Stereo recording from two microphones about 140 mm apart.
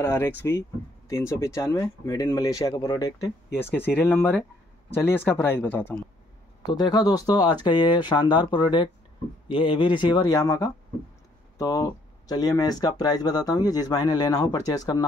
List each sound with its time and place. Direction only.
0.0 s speech: 15° left (ahead or behind)
6.6 s speech: 30° left (ahead or behind)